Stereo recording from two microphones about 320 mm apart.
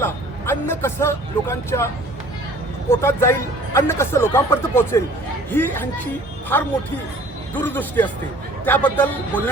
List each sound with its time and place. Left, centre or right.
0.0 s speech: centre
3.0 s speech: centre